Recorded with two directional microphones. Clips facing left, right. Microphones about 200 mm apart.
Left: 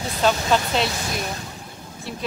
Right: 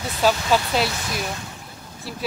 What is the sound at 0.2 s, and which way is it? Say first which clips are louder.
Speech: even; 5° right (ahead or behind).